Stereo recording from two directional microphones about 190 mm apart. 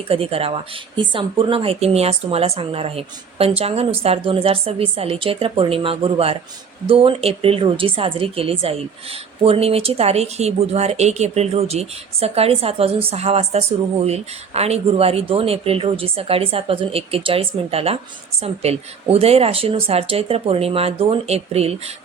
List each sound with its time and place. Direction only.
0.1 s a woman's voice: 30° right (ahead or behind)